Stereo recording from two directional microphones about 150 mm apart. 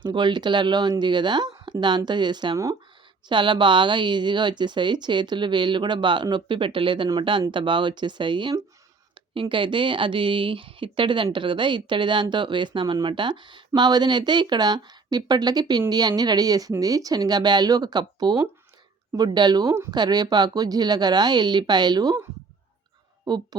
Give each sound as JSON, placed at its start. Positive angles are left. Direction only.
{"t": 0.0, "sound": "a woman's voice", "side_deg": -30}